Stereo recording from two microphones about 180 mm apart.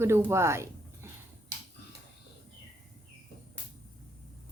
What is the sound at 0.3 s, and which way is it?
Speech, 15° right (ahead or behind).